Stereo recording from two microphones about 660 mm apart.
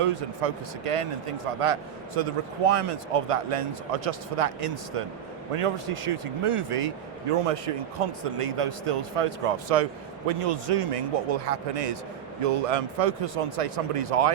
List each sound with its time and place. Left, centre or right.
0.0 s a man's voice: right